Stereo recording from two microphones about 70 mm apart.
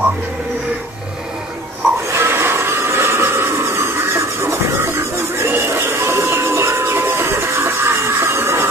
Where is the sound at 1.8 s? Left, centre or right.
Right.